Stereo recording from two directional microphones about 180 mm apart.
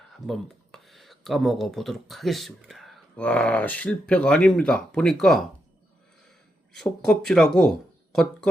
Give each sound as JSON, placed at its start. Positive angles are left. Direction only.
{"t": 0.3, "sound": "speech", "side_deg": 0}
{"t": 6.7, "sound": "speech", "side_deg": 5}